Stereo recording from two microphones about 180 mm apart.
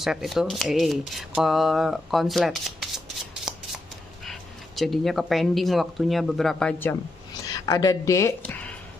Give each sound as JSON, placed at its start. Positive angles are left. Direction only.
{"t": 0.0, "sound": "speech", "side_deg": 0}
{"t": 7.6, "sound": "speech", "side_deg": 20}